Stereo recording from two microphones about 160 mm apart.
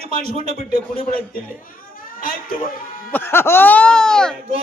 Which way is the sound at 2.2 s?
60° left (ahead or behind).